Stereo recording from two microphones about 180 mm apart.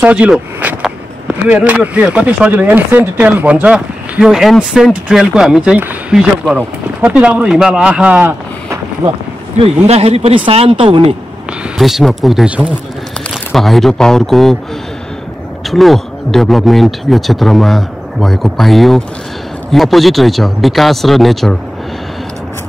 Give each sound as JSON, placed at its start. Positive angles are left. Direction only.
{"t": 0.0, "sound": "speech", "side_deg": -5}
{"t": 9.6, "sound": "speech", "side_deg": -35}
{"t": 11.8, "sound": "speech", "side_deg": 0}
{"t": 15.7, "sound": "speech", "side_deg": 0}